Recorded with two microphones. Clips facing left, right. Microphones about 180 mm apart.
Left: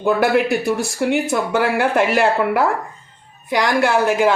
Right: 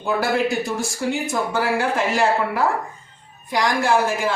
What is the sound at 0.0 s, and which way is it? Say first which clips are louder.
A woman's voice: left 5 dB; 65° left (ahead or behind).